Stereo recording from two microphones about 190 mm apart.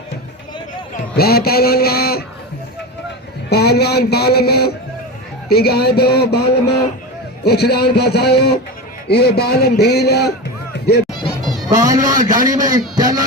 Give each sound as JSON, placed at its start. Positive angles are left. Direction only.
{"t": 1.1, "sound": "speech", "side_deg": 55}
{"t": 3.5, "sound": "speech", "side_deg": 60}
{"t": 11.7, "sound": "a man's voice", "side_deg": -20}